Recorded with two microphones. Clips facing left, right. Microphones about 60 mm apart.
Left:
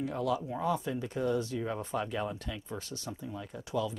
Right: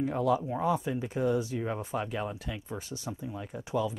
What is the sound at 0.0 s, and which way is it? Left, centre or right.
Speech, right.